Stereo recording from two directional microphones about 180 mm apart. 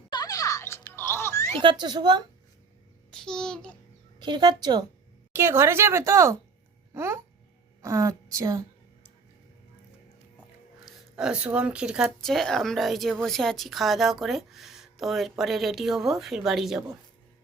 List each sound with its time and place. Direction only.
0.1 s music: 20° left (ahead or behind)
1.8 s a woman's voice: 25° right (ahead or behind)
3.1 s a child's voice: 5° left (ahead or behind)
4.2 s a woman's voice: 25° right (ahead or behind)
11.2 s speech: 5° right (ahead or behind)